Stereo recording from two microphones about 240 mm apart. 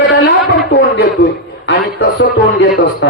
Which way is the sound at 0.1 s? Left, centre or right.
Left.